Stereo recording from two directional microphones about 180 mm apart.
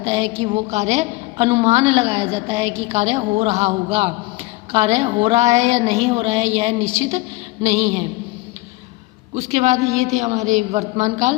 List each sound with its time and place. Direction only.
0.0 s a woman's voice: 35° right (ahead or behind)
9.3 s a woman's voice: 40° right (ahead or behind)